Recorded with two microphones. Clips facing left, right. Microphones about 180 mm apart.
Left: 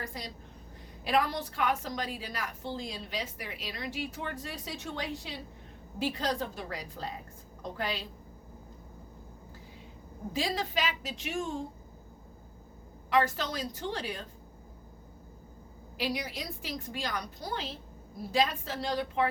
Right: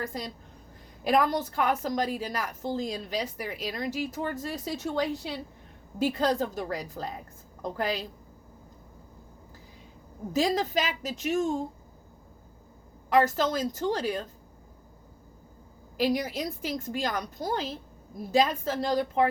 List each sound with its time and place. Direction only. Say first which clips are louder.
1.0 s a woman's voice: right 5 dB; 45° right (ahead or behind)
10.3 s a woman's voice: right 7 dB; 45° right (ahead or behind)
13.1 s a woman's voice: right 5 dB; 45° right (ahead or behind)
16.0 s a woman's voice: right 7 dB; 45° right (ahead or behind)